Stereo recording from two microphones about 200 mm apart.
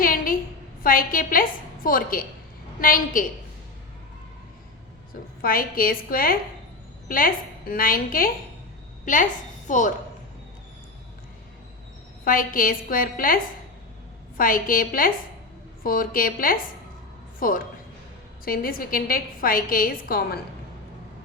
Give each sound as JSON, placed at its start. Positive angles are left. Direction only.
{"t": 0.0, "sound": "a sound", "side_deg": 45}
{"t": 0.8, "sound": "a woman's voice", "side_deg": 45}
{"t": 5.4, "sound": "a woman's voice", "side_deg": 45}
{"t": 9.6, "sound": "speech", "side_deg": 40}
{"t": 12.2, "sound": "a woman's voice", "side_deg": 45}